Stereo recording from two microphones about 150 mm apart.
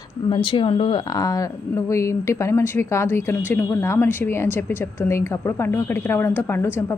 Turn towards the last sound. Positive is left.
turn(degrees=15)  # may be behind; listen again after turning